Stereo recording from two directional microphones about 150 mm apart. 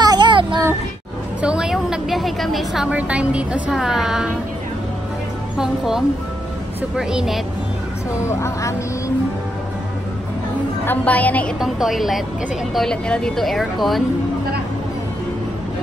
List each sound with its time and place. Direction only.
0.0 s child singing: 30° right (ahead or behind)
1.4 s a woman's voice: 5° right (ahead or behind)
5.6 s speech: 5° right (ahead or behind)
8.2 s speech: 20° left (ahead or behind)
10.9 s a woman's voice: 10° left (ahead or behind)
11.6 s speech: centre (ahead or behind)